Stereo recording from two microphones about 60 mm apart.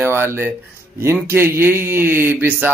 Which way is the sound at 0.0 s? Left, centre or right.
Right.